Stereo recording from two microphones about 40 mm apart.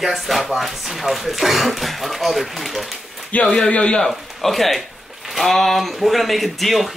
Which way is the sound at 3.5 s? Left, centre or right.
Left.